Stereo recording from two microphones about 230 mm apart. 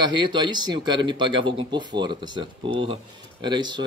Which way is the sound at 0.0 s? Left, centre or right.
Centre.